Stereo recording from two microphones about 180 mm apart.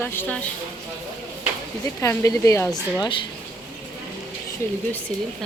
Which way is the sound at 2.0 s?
15° left (ahead or behind).